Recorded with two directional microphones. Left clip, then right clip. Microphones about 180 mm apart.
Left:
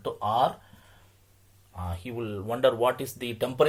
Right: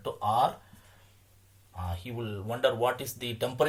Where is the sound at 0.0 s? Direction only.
40° left (ahead or behind).